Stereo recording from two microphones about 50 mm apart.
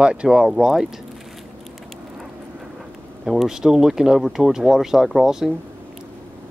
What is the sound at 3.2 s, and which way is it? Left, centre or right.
Speech, centre.